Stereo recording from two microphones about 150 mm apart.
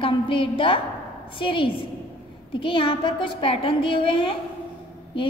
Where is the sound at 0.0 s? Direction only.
35° left (ahead or behind).